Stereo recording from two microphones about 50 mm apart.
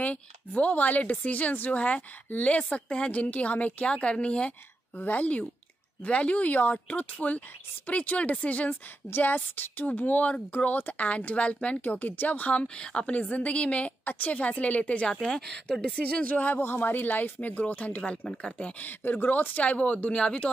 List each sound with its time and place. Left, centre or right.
0.0 s speech: left
4.9 s speech: left
9.1 s speech: left
12.6 s speech: centre
13.1 s speech: left
15.2 s speech: centre
16.0 s speech: left
18.7 s speech: left